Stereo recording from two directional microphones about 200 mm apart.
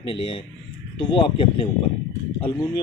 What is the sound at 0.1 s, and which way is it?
A man's voice, 25° left (ahead or behind).